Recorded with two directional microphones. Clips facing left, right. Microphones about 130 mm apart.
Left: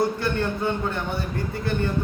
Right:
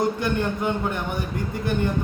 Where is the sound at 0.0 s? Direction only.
15° right (ahead or behind).